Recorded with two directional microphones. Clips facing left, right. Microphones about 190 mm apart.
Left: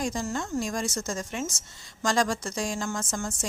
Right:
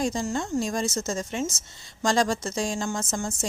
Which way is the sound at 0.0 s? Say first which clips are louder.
Right 3 dB; 25° right (ahead or behind).